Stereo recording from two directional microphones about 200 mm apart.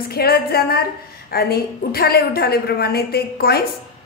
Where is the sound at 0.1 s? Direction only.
50° left (ahead or behind).